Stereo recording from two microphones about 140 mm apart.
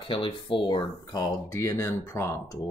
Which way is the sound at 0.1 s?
35° left (ahead or behind).